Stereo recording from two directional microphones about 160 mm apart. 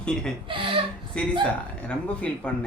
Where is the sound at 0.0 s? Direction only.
5° left (ahead or behind).